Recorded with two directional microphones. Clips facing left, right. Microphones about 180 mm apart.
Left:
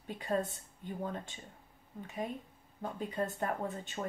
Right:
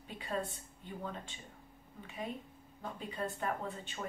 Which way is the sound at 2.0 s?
40° left (ahead or behind).